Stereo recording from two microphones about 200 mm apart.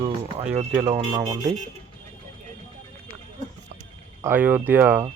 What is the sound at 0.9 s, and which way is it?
Speech, 25° right (ahead or behind).